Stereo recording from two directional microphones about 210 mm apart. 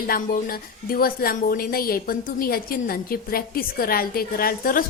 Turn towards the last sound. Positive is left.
turn(degrees=45)  # may be behind; listen again after turning